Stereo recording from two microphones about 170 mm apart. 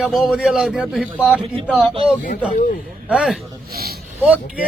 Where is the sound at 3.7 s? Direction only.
65° right (ahead or behind).